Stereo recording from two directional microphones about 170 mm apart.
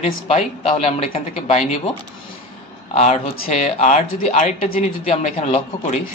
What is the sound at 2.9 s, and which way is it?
Speech, 40° left (ahead or behind).